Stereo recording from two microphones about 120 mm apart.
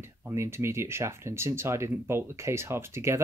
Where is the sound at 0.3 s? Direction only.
20° right (ahead or behind).